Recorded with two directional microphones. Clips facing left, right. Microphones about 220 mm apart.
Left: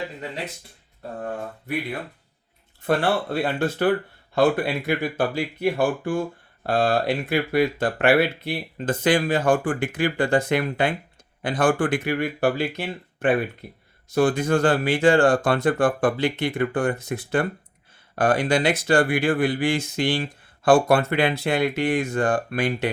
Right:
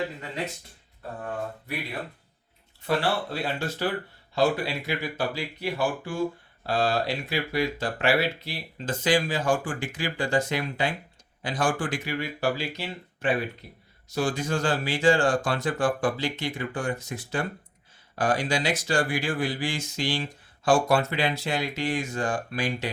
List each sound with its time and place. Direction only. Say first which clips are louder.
2.8 s speech: left 4 dB; 50° left (ahead or behind)